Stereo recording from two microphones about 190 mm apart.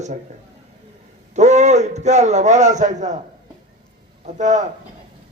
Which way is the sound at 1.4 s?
40° right (ahead or behind).